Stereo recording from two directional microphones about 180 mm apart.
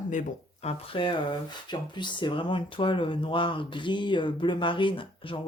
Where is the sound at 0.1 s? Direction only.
40° left (ahead or behind).